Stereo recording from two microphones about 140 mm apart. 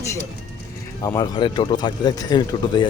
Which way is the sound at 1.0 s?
30° left (ahead or behind).